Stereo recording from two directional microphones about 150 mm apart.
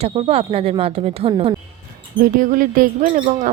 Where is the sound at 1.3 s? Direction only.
30° right (ahead or behind).